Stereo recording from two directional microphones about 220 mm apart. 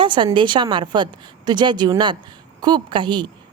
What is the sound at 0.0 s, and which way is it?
Speech, 20° right (ahead or behind).